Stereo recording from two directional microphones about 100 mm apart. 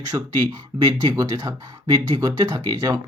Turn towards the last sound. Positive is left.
turn(degrees=-35)  # may be behind; listen again after turning